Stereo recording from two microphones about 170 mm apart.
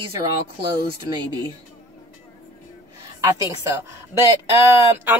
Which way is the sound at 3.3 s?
15° right (ahead or behind).